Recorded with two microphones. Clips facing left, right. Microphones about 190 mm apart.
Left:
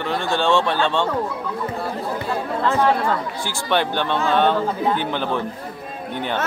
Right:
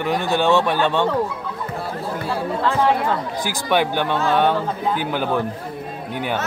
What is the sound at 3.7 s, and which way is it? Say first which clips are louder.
A man's voice: right 1 dB; 10° right (ahead or behind).